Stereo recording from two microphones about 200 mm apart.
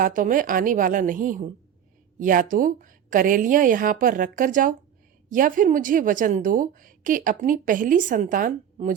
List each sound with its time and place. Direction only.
0.0 s a woman's voice: 40° right (ahead or behind)